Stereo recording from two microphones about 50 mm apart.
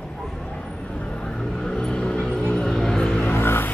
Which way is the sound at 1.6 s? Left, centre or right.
Centre.